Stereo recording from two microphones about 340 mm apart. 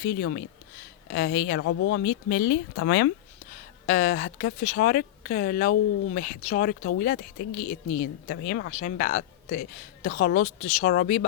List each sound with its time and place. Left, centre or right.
0.0 s a woman's voice: left
3.5 s a woman's voice: left